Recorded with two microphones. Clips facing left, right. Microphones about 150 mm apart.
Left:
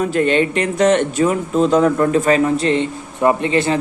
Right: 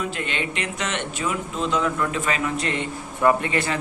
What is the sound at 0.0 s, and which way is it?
Speech, 40° left (ahead or behind).